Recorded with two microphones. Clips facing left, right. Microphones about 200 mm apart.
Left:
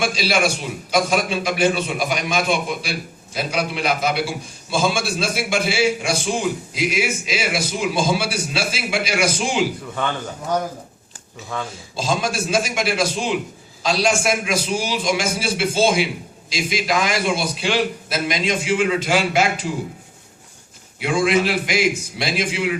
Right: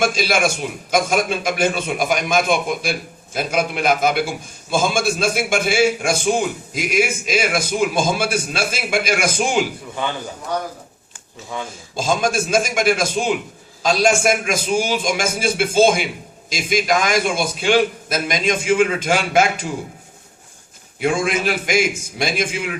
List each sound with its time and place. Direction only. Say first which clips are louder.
0.0 s a man's voice: right 2 dB; 50° right (ahead or behind)
11.9 s a man's voice: right 3 dB; 50° right (ahead or behind)
21.0 s a man's voice: left 1 dB; 50° right (ahead or behind)